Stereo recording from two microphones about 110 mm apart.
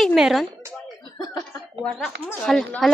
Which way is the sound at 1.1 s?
35° left (ahead or behind).